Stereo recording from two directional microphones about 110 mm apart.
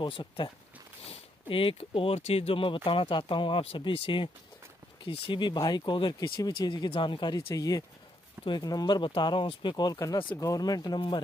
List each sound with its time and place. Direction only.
0.0 s speech: 45° left (ahead or behind)
5.4 s speech: 40° left (ahead or behind)